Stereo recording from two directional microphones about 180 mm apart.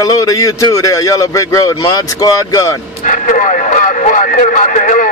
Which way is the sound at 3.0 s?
45° left (ahead or behind).